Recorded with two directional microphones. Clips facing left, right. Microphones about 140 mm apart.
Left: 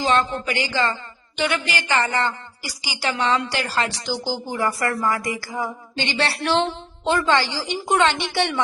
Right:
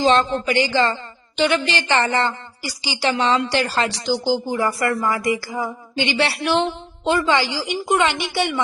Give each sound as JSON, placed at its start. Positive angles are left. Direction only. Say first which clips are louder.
{"t": 0.0, "sound": "a woman's voice", "louder": "right 4 dB", "side_deg": -30}
{"t": 3.8, "sound": "a woman's voice", "louder": "right 6 dB", "side_deg": -20}